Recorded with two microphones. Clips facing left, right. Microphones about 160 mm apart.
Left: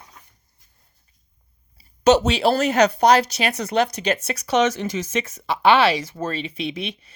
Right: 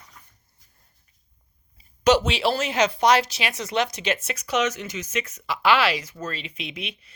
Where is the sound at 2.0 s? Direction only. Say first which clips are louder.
Left 3 dB; 40° left (ahead or behind).